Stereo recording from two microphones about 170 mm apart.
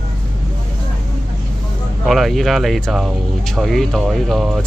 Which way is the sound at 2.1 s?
Centre (ahead or behind).